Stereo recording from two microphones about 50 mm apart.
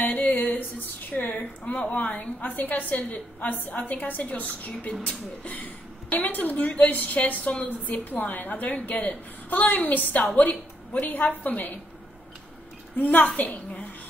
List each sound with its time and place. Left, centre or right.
0.0 s a sound: left
3.1 s a woman's voice: left
12.9 s a woman's voice: left